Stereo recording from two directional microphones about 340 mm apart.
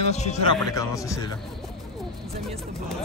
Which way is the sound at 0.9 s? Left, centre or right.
Centre.